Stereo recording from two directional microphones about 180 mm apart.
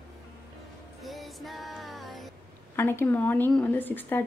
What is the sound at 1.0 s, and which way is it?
Music, centre (ahead or behind).